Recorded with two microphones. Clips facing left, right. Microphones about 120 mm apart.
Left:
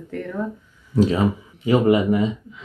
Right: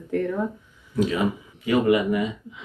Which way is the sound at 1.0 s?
30° left (ahead or behind).